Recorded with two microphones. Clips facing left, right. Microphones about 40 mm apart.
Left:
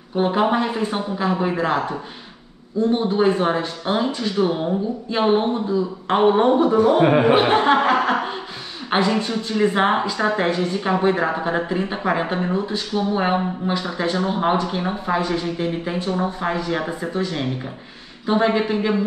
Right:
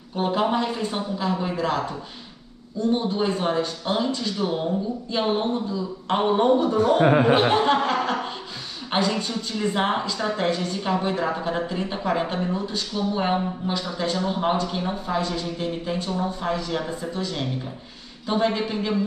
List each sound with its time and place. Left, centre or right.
0.1 s speech: left
7.0 s speech: left
7.2 s speech: left